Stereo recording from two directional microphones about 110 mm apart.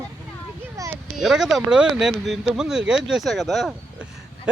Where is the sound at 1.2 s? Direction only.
5° right (ahead or behind).